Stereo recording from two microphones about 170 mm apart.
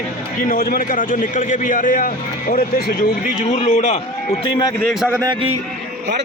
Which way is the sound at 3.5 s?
40° left (ahead or behind).